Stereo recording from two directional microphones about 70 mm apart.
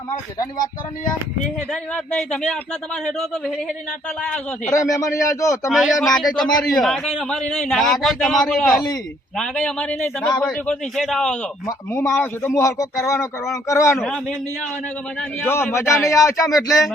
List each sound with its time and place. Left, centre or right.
2.1 s a man's voice: centre
4.7 s speech: left
5.6 s a man's voice: centre
12.1 s a man's voice: left
12.5 s speech: left
15.4 s a man's voice: left
16.0 s speech: left